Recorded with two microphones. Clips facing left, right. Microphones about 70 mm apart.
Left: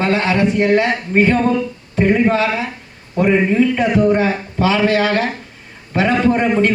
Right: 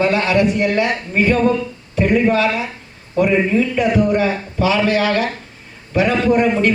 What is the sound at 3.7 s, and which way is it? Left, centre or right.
A man's voice, left.